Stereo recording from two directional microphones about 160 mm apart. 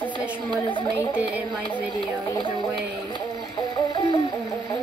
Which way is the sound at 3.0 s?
25° left (ahead or behind).